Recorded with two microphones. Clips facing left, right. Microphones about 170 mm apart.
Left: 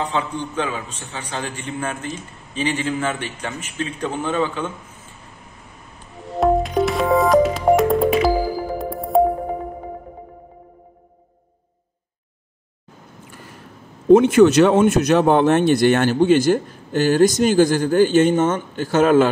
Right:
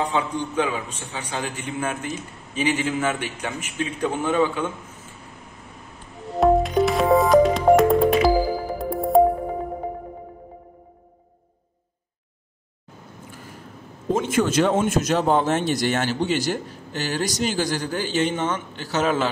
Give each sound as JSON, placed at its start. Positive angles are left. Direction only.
{"t": 0.0, "sound": "a man's voice", "side_deg": -10}
{"t": 6.4, "sound": "music", "side_deg": 0}
{"t": 14.1, "sound": "a man's voice", "side_deg": 65}